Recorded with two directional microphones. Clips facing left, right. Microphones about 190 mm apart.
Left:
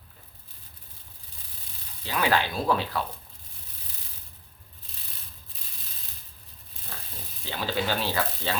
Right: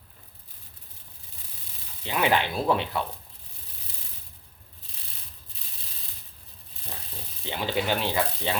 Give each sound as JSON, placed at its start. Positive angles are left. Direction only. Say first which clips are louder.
{"t": 2.0, "sound": "speech", "louder": "right 1 dB", "side_deg": -20}
{"t": 7.4, "sound": "speech", "louder": "right 1 dB", "side_deg": -20}